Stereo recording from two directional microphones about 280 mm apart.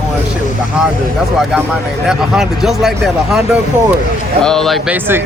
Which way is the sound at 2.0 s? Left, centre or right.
Centre.